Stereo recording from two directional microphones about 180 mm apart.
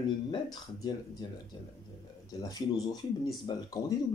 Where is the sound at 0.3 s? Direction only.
25° left (ahead or behind).